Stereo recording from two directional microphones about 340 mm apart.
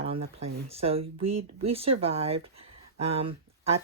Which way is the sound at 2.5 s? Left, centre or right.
Centre.